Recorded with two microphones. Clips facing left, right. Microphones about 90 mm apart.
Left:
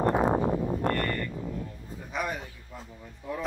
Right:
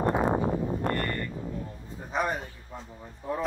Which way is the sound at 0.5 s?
20° left (ahead or behind).